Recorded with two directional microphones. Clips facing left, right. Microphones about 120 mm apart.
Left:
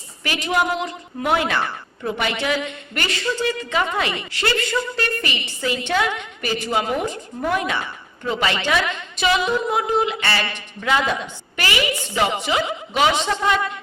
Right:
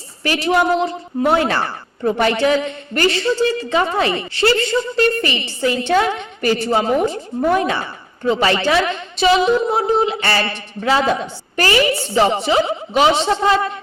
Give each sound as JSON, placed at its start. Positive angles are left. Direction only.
{"t": 0.2, "sound": "a woman's voice", "side_deg": -35}